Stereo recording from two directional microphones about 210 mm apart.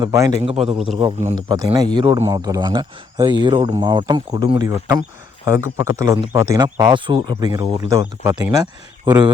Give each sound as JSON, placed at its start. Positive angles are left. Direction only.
{"t": 0.0, "sound": "speech", "side_deg": -15}
{"t": 0.4, "sound": "a man's voice", "side_deg": -30}
{"t": 1.4, "sound": "a man's voice", "side_deg": -20}